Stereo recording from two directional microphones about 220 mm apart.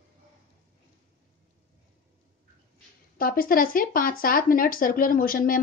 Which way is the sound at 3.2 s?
40° left (ahead or behind).